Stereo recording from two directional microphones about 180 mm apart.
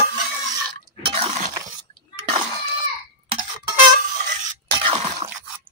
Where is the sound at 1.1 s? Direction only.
40° right (ahead or behind).